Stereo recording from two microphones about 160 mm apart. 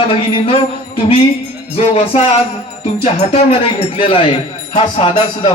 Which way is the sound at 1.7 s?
40° left (ahead or behind).